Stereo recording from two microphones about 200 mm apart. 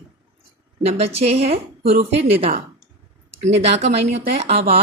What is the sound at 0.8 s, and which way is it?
A woman's voice, 30° right (ahead or behind).